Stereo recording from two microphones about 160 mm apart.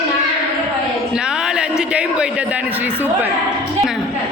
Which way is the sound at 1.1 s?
5° right (ahead or behind).